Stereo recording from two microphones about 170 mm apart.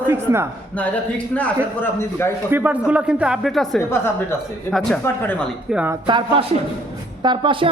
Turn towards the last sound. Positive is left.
turn(degrees=-30)  # may be behind; listen again after turning